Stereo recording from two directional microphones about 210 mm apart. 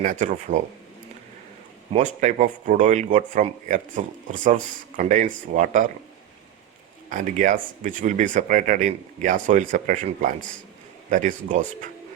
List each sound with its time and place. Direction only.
0.0 s speech: 40° right (ahead or behind)
1.9 s speech: 35° right (ahead or behind)
7.1 s speech: 40° right (ahead or behind)